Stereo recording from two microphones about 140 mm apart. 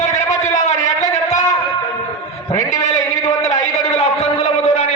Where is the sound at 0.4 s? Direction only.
55° left (ahead or behind).